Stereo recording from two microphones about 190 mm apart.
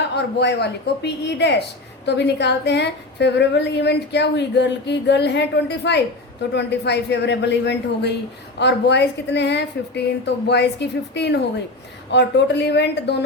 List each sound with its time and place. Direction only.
0.2 s a woman's voice: 60° left (ahead or behind)